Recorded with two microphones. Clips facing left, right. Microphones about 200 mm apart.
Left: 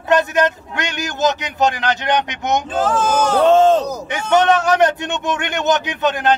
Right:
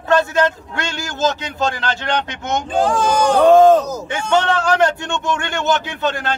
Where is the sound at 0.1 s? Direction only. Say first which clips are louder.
Even; 20° left (ahead or behind).